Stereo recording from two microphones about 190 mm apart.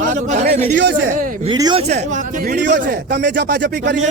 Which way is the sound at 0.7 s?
65° right (ahead or behind).